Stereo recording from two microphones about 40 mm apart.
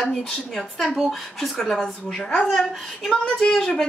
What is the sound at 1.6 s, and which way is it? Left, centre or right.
Speech, centre.